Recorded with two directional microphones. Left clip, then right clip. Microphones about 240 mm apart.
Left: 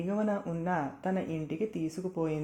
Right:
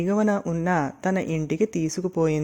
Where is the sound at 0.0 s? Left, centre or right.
Right.